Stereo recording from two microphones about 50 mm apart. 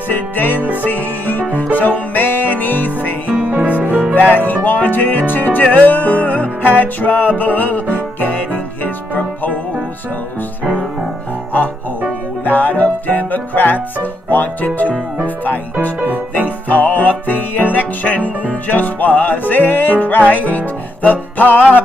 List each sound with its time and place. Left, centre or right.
0.1 s music: left
3.4 s music: right
4.1 s music: left
12.4 s music: left